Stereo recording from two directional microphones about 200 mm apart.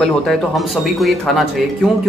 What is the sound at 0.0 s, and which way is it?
Speech, centre (ahead or behind).